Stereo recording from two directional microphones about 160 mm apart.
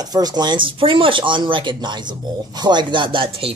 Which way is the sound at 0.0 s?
25° right (ahead or behind).